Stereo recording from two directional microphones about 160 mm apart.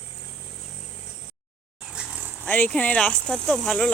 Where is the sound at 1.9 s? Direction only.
5° right (ahead or behind).